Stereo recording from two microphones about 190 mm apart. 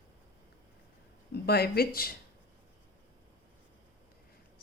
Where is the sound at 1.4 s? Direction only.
55° left (ahead or behind).